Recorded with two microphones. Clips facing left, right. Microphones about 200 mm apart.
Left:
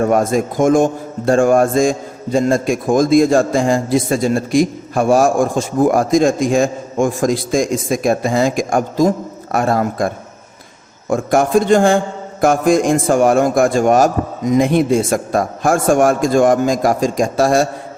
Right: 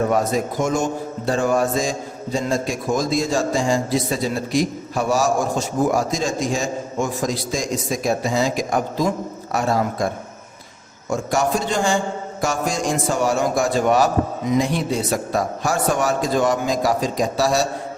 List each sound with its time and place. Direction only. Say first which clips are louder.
0.0 s a man's voice: left 5 dB; 50° left (ahead or behind)
11.1 s a man's voice: left 7 dB; 55° left (ahead or behind)